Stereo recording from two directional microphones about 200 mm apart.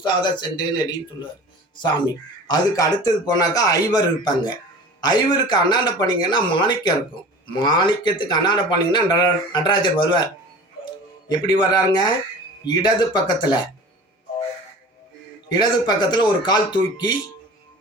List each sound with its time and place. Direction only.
0.0 s a man's voice: 20° left (ahead or behind)
2.5 s a man's voice: 20° left (ahead or behind)
11.3 s a man's voice: 20° left (ahead or behind)
15.5 s a man's voice: 20° left (ahead or behind)